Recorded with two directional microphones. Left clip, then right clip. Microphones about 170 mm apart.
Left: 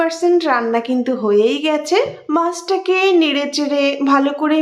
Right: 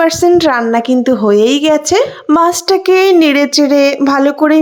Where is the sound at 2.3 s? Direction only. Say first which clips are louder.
Right 8 dB; 55° right (ahead or behind).